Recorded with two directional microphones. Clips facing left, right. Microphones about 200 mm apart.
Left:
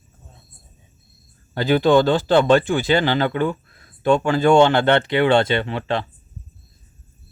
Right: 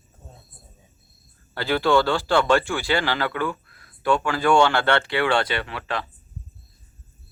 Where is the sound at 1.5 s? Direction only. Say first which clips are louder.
Left 5 dB; 20° left (ahead or behind).